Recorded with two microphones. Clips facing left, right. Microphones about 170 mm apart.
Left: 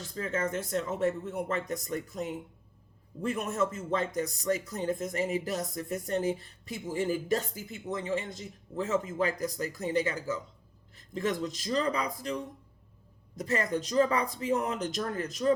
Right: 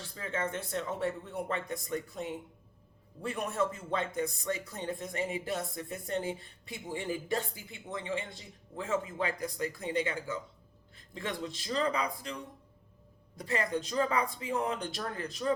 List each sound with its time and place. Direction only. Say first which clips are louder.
0.0 s a man's voice: left 4 dB; 45° left (ahead or behind)